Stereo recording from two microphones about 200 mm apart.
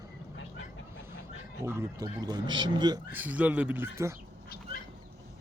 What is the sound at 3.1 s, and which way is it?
Speech, 10° right (ahead or behind).